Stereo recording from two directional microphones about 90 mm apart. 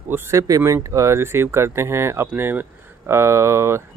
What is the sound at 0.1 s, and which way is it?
Speech, 35° right (ahead or behind).